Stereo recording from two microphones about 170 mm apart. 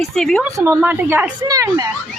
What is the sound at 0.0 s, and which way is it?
Speech, centre (ahead or behind).